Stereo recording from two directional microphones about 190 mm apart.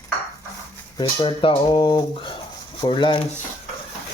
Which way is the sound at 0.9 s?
25° left (ahead or behind).